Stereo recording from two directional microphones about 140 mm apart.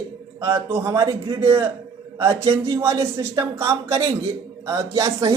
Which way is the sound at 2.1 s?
20° right (ahead or behind).